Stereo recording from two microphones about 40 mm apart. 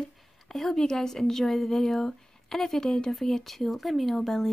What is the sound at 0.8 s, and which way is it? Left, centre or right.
A woman's voice, centre.